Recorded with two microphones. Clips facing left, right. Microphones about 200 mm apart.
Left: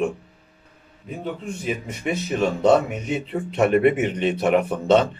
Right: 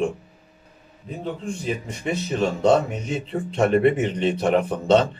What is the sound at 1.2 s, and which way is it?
Speech, 10° left (ahead or behind).